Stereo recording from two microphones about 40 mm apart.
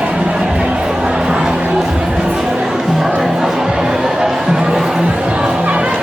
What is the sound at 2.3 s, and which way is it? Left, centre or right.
Music, centre.